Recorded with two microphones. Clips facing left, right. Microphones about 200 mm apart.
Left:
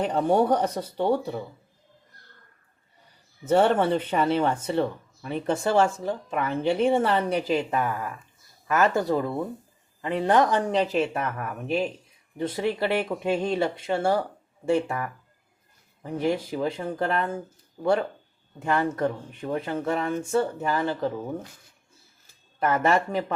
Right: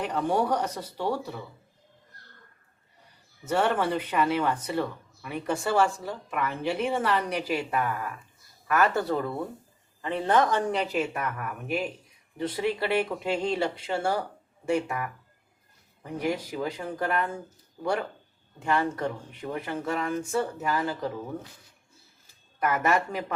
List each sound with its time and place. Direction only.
0.0 s speech: 30° left (ahead or behind)
3.4 s speech: 30° left (ahead or behind)
16.1 s speech: 25° left (ahead or behind)
18.6 s speech: 20° left (ahead or behind)
22.6 s speech: 25° left (ahead or behind)